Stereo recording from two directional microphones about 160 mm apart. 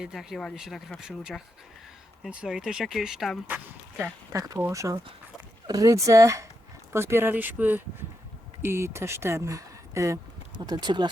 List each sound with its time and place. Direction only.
0.0 s speech: centre (ahead or behind)
3.9 s speech: 15° right (ahead or behind)